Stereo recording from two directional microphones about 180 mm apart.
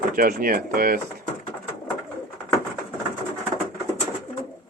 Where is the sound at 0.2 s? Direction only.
55° right (ahead or behind).